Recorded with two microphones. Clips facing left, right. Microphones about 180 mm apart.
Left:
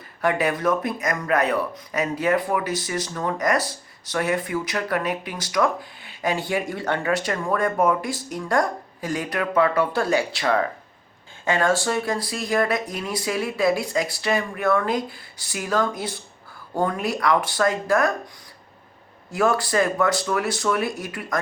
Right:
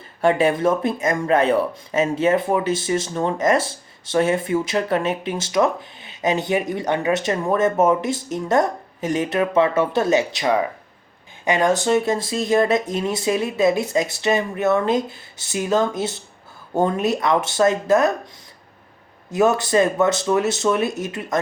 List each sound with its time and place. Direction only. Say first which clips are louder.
0.2 s speech: right 5 dB; 25° right (ahead or behind)
19.3 s speech: right 4 dB; 20° right (ahead or behind)